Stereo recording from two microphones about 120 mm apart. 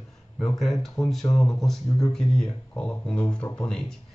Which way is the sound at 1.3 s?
30° left (ahead or behind).